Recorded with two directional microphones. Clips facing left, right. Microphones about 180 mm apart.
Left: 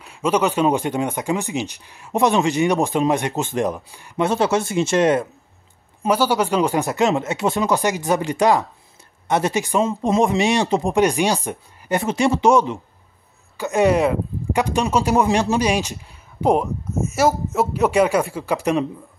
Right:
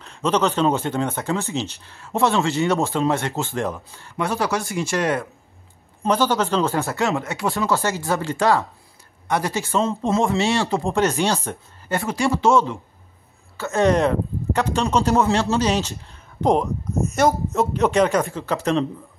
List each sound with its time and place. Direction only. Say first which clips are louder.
0.0 s speech: left 1 dB; 10° left (ahead or behind)
6.0 s speech: left 1 dB; 10° left (ahead or behind)